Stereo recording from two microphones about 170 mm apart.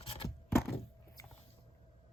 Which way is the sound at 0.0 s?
35° left (ahead or behind).